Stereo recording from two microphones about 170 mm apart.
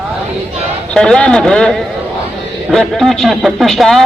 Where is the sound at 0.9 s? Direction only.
5° left (ahead or behind).